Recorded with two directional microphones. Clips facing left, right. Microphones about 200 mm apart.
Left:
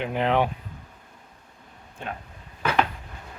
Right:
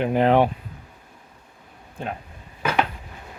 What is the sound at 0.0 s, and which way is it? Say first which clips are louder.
Speech: right 5 dB; 45° right (ahead or behind).